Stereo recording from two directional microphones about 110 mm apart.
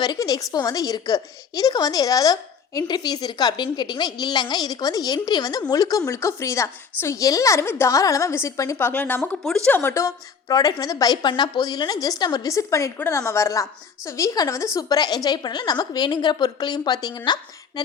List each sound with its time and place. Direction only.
0.0 s a woman's voice: 40° left (ahead or behind)